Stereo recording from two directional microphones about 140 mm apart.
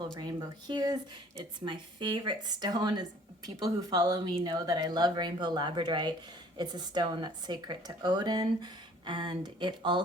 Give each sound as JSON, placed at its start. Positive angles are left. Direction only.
{"t": 0.0, "sound": "speech", "side_deg": -30}